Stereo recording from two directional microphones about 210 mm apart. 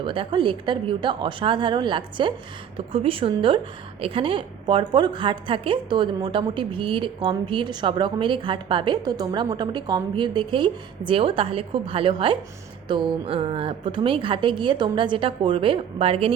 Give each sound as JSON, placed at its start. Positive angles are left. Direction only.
{"t": 0.0, "sound": "a woman's voice", "side_deg": -25}